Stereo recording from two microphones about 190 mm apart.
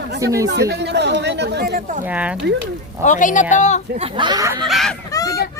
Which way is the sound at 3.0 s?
40° left (ahead or behind).